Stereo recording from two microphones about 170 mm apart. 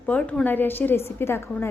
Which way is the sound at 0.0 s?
5° left (ahead or behind).